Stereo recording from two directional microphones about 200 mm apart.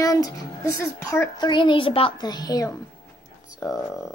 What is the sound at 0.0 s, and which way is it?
Speech, 15° left (ahead or behind).